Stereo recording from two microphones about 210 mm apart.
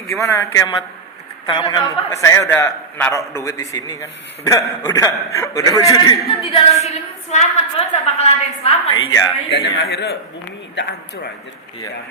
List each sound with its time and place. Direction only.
0.2 s a man's voice: 15° left (ahead or behind)
9.0 s a man's voice: 15° left (ahead or behind)
9.5 s a man's voice: 50° left (ahead or behind)